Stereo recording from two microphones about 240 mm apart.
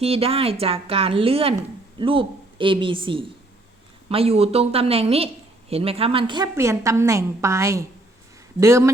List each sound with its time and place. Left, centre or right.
0.0 s a woman's voice: right